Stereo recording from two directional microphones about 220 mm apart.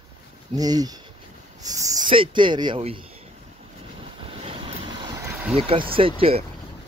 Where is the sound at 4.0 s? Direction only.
20° right (ahead or behind).